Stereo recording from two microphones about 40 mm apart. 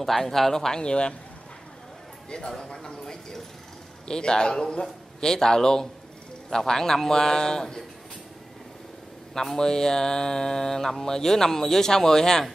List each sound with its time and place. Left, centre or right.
0.0 s speech: centre; by 1.1 s left
2.2 s a man's voice: centre
9.3 s speech: centre